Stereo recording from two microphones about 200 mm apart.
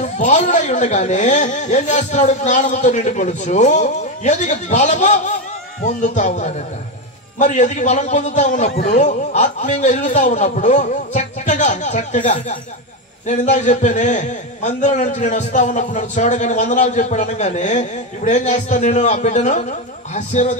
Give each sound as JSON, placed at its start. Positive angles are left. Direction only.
{"t": 0.0, "sound": "a man's voice", "side_deg": 35}